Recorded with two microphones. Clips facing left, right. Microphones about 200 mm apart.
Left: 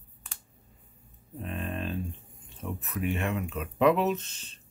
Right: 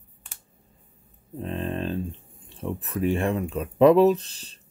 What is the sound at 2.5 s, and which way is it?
Speech, 30° right (ahead or behind).